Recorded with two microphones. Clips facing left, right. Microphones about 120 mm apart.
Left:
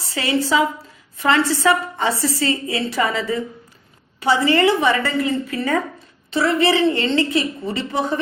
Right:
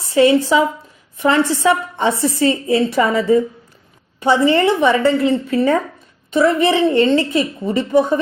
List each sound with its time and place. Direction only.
0.0 s a woman's voice: 25° right (ahead or behind)